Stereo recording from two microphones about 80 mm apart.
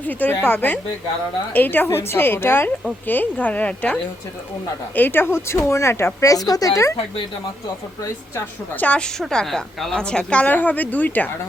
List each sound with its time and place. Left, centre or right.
0.1 s a woman's voice: left
4.9 s a woman's voice: left
8.8 s a woman's voice: centre
9.1 s a woman's voice: centre